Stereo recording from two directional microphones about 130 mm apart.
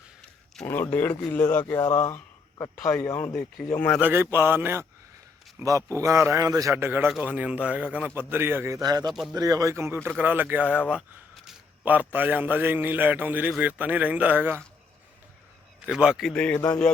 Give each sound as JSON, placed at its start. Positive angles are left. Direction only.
{"t": 0.6, "sound": "speech", "side_deg": 15}
{"t": 4.0, "sound": "a man's voice", "side_deg": -15}
{"t": 8.8, "sound": "a man's voice", "side_deg": -30}
{"t": 9.0, "sound": "a man's voice", "side_deg": 0}
{"t": 9.3, "sound": "a man's voice", "side_deg": -30}
{"t": 15.9, "sound": "a man's voice", "side_deg": -5}
{"t": 16.3, "sound": "speech", "side_deg": 10}